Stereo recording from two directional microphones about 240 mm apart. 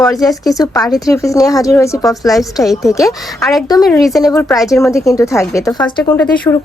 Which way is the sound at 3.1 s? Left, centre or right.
Centre.